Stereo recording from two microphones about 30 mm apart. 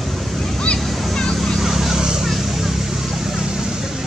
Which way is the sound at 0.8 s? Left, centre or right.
Centre.